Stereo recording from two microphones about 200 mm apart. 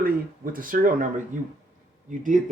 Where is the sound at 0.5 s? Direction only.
45° right (ahead or behind).